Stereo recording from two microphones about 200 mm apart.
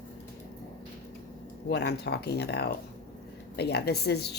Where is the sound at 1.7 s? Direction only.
55° left (ahead or behind).